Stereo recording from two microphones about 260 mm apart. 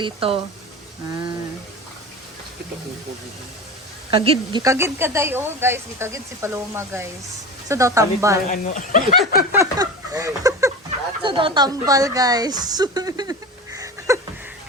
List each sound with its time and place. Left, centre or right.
0.0 s speech: right
4.1 s a woman's voice: right
8.4 s speech: left
9.5 s a sound: centre
11.2 s a woman's voice: centre
13.7 s a sound: centre